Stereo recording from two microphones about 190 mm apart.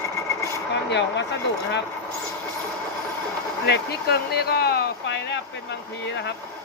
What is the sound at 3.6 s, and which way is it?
Speech, 60° left (ahead or behind).